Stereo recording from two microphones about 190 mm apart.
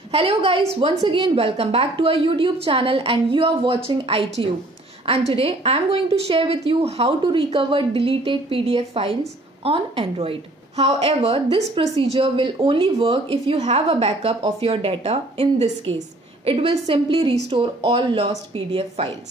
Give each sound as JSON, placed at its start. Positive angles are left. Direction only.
{"t": 0.1, "sound": "a woman's voice", "side_deg": -30}